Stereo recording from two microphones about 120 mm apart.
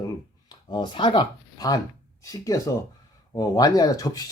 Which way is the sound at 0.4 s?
40° left (ahead or behind).